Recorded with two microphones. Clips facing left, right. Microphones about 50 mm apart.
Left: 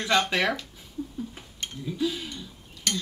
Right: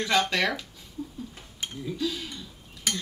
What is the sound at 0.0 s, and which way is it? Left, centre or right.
Speech, centre.